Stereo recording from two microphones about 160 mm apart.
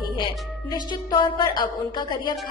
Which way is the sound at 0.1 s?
30° left (ahead or behind).